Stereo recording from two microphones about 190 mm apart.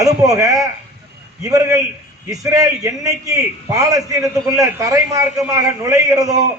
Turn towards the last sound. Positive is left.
turn(degrees=-20)  # may be behind; listen again after turning